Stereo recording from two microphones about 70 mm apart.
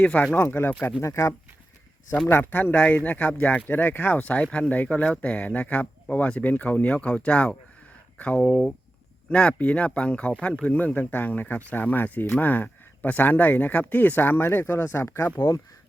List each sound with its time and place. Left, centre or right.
0.0 s speech: left
0.3 s speech: left
0.7 s speech: left
1.0 s speech: left
2.2 s speech: left